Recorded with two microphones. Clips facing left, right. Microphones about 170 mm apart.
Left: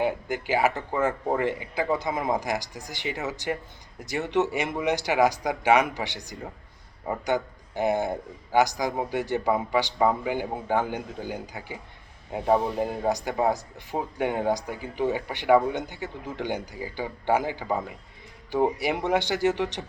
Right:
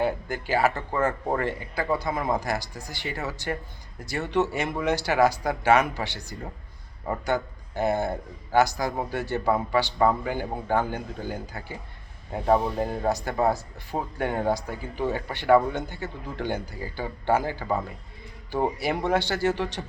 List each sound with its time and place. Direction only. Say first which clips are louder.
0.0 s speech: even; 15° left (ahead or behind)